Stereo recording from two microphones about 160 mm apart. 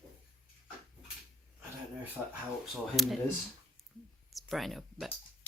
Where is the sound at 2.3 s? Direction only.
Centre (ahead or behind).